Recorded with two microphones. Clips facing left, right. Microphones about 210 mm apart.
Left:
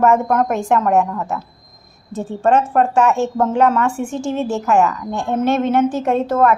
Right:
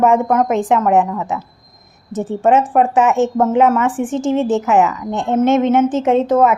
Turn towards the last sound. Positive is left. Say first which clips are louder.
# right 3 dB
turn(degrees=-20)  # may be behind; listen again after turning